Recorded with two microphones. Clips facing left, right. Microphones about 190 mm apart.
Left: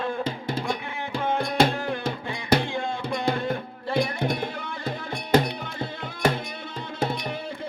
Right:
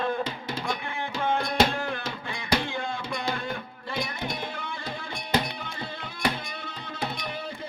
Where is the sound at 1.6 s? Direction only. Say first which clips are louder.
Left 5 dB; 55° left (ahead or behind).